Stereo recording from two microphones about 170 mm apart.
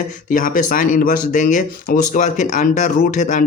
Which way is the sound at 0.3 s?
50° left (ahead or behind).